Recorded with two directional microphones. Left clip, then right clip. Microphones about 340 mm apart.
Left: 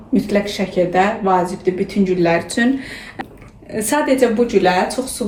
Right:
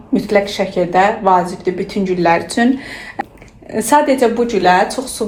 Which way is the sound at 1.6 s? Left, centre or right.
Centre.